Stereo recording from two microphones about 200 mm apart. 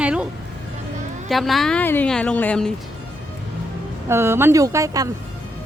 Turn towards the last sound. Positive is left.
turn(degrees=-15)  # may be behind; listen again after turning